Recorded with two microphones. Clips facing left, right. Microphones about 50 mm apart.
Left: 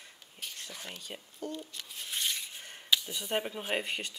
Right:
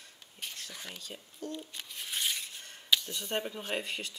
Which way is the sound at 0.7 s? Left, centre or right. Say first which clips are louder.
Left 1 dB; centre.